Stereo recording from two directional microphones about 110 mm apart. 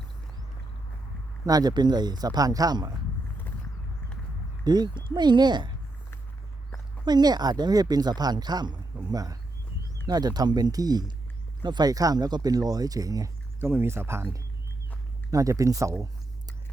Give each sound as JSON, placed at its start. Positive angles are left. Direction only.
{"t": 1.5, "sound": "speech", "side_deg": -35}
{"t": 4.6, "sound": "speech", "side_deg": -40}
{"t": 7.0, "sound": "speech", "side_deg": -40}
{"t": 13.6, "sound": "speech", "side_deg": -20}